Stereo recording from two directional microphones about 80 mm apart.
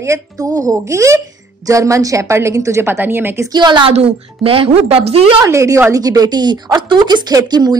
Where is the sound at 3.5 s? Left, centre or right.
Right.